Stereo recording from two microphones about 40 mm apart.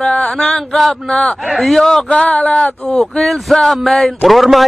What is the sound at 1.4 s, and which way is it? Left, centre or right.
Speech, centre.